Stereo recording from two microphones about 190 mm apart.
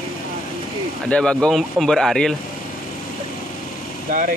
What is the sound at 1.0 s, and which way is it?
Speech, 5° left (ahead or behind).